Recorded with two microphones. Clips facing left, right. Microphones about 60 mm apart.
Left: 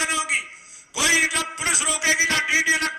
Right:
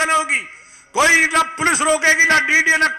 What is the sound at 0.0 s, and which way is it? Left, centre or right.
A man's voice, right.